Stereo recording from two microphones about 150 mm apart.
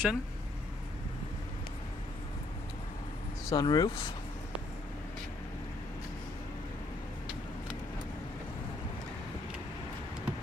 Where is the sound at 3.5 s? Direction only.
25° left (ahead or behind).